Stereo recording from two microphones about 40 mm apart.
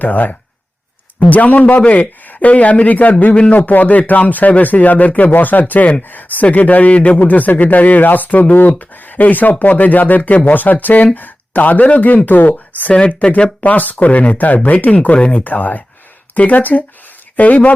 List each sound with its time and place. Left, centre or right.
0.0 s speech: left
15.4 s speech: left